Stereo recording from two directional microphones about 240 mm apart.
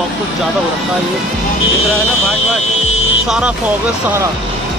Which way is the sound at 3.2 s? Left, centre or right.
Centre.